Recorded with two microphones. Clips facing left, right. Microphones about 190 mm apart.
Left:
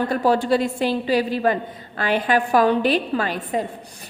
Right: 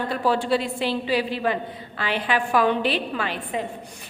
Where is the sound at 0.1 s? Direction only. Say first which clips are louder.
Left 2 dB; 40° left (ahead or behind).